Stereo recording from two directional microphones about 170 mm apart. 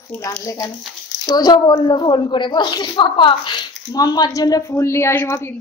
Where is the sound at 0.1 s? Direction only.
15° left (ahead or behind).